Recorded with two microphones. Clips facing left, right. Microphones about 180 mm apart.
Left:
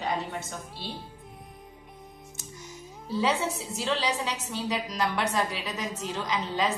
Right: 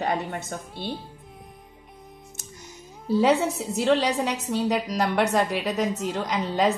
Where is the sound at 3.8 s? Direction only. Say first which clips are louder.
Right 7 dB; 50° right (ahead or behind).